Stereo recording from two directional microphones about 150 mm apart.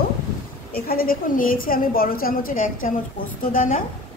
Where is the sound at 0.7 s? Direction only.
80° left.